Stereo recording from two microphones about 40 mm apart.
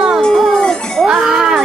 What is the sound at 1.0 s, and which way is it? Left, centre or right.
Speech, centre.